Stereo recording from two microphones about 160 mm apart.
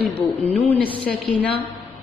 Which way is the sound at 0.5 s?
40° left (ahead or behind).